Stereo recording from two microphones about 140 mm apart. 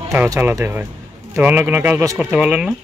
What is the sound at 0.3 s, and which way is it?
Speech, 20° right (ahead or behind).